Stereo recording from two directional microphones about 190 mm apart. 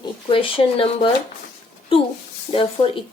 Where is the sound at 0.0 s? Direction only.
25° left (ahead or behind).